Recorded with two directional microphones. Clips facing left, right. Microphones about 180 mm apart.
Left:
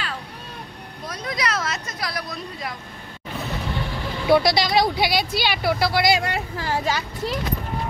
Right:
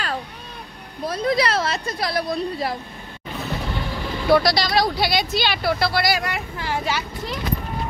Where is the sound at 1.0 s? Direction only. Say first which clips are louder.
Right 7 dB; 30° right (ahead or behind).